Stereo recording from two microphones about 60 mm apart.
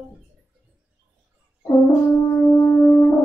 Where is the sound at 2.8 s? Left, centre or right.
Left.